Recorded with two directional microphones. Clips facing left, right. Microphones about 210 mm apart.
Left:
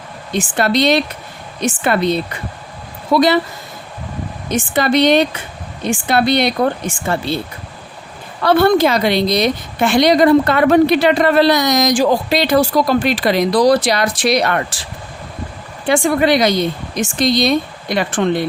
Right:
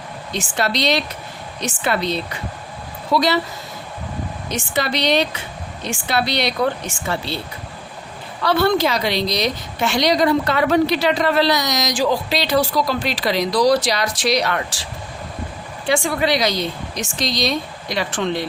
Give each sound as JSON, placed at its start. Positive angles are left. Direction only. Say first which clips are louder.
{"t": 0.3, "sound": "a woman's voice", "louder": "left 6 dB", "side_deg": 55}
{"t": 4.4, "sound": "a woman's voice", "louder": "left 7 dB", "side_deg": 55}
{"t": 15.9, "sound": "a woman's voice", "louder": "left 5 dB", "side_deg": 55}